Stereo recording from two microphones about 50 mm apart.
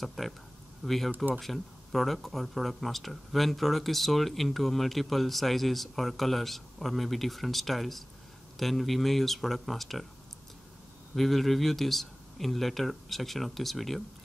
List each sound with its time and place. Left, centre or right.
0.0 s speech: centre
1.1 s speech: right
1.4 s speech: centre
11.1 s speech: centre